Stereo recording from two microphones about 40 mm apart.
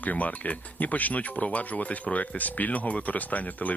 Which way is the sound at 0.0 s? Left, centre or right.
Left.